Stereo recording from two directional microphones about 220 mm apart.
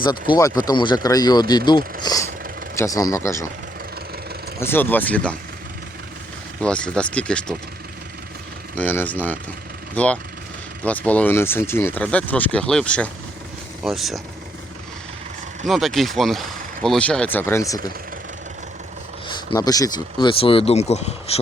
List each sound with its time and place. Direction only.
0.0 s speech: 20° left (ahead or behind)
4.6 s speech: 10° left (ahead or behind)
6.6 s speech: 5° left (ahead or behind)
8.7 s speech: 5° left (ahead or behind)
15.6 s speech: centre (ahead or behind)
19.5 s speech: 15° left (ahead or behind)